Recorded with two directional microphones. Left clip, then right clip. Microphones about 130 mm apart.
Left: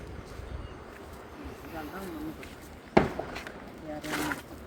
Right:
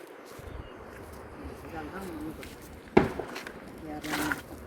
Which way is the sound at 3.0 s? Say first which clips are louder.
Right 1 dB; 45° left (ahead or behind).